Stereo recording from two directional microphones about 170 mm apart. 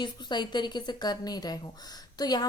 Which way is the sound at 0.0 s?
25° left (ahead or behind).